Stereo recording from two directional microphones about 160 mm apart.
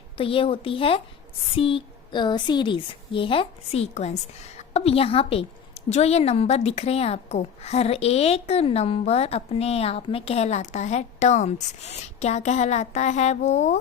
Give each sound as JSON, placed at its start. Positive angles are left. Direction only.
{"t": 0.2, "sound": "a woman's voice", "side_deg": 35}